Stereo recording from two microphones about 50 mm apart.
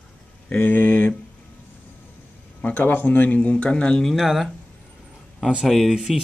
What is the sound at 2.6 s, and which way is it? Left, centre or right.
Speech, left.